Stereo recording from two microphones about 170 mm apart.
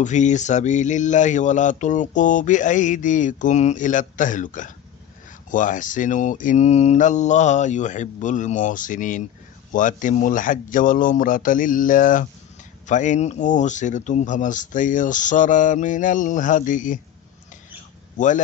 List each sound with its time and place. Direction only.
0.0 s speech: 45° left (ahead or behind)
18.1 s speech: 45° left (ahead or behind)